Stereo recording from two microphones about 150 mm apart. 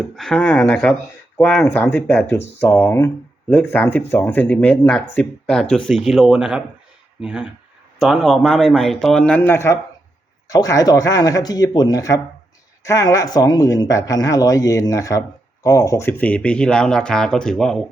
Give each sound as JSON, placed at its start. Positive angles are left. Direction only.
{"t": 0.2, "sound": "speech", "side_deg": 5}